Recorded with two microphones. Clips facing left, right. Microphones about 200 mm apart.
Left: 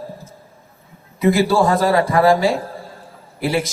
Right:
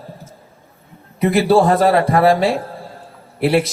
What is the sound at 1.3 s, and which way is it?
A man's voice, 65° right (ahead or behind).